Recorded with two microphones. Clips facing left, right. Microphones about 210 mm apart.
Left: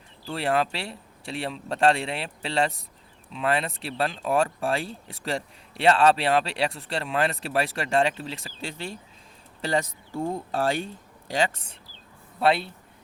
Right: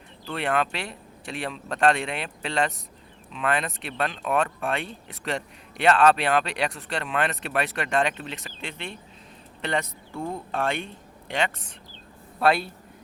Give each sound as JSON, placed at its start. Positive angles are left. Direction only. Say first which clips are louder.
{"t": 0.3, "sound": "speech", "louder": "left 1 dB", "side_deg": 30}
{"t": 12.4, "sound": "speech", "louder": "even", "side_deg": 25}